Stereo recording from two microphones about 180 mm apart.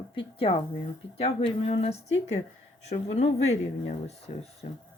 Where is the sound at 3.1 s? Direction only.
35° left (ahead or behind).